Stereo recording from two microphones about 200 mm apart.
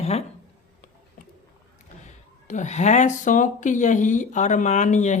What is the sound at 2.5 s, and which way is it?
Speech, 35° left (ahead or behind).